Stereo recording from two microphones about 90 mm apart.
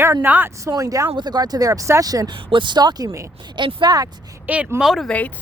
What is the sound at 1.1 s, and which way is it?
Speech, 50° right (ahead or behind).